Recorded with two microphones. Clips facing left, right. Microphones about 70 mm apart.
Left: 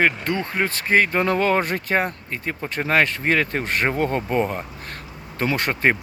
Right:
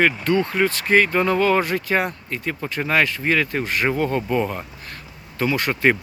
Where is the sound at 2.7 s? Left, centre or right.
Left.